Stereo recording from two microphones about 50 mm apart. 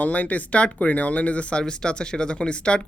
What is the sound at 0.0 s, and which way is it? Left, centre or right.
Speech, left.